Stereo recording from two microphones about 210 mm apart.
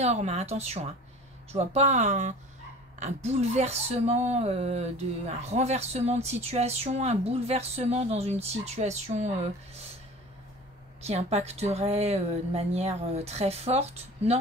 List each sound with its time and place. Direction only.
0.0 s speech: 30° right (ahead or behind)
11.0 s speech: 30° right (ahead or behind)